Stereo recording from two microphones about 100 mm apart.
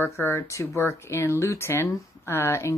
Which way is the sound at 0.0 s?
30° left (ahead or behind).